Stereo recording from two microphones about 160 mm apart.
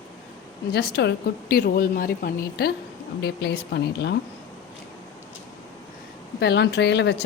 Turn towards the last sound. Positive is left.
turn(degrees=90)